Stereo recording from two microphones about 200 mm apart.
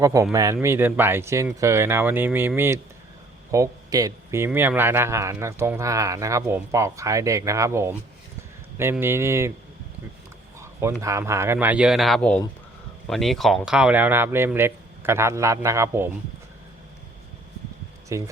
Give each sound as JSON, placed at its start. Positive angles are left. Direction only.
{"t": 0.0, "sound": "speech", "side_deg": -15}
{"t": 10.6, "sound": "a sound", "side_deg": -10}
{"t": 11.0, "sound": "speech", "side_deg": -15}
{"t": 18.1, "sound": "speech", "side_deg": -15}